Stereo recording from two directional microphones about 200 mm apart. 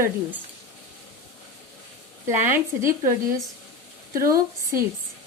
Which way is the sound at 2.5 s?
15° right (ahead or behind).